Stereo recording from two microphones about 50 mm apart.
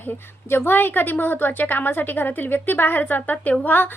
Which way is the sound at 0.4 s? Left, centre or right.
Left.